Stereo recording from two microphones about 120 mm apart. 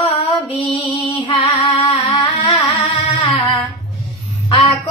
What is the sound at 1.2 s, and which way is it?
Singing, 45° left (ahead or behind).